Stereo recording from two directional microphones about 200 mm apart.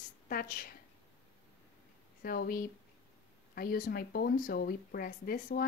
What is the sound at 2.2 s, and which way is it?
Speech, 50° left (ahead or behind).